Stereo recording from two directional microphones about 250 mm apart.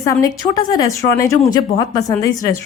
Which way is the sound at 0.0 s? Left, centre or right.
Centre.